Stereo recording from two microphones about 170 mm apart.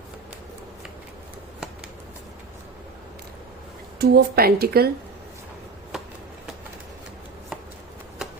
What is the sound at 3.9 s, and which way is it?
Speech, 70° right (ahead or behind).